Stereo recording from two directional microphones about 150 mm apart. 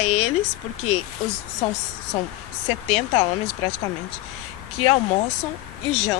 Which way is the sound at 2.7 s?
40° left (ahead or behind).